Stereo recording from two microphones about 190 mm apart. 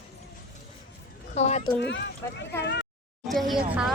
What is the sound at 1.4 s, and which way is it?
Speech, 35° left (ahead or behind).